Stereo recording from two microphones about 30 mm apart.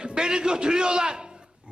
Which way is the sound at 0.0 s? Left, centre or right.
Right.